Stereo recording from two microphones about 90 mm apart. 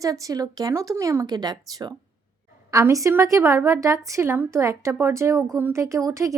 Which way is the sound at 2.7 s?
40° right (ahead or behind).